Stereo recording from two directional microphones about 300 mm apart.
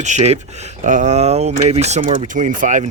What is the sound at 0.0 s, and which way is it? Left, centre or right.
Speech, right.